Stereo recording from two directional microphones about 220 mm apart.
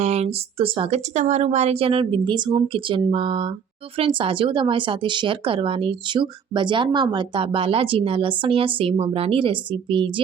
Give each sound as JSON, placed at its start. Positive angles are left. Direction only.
{"t": 0.0, "sound": "speech", "side_deg": -30}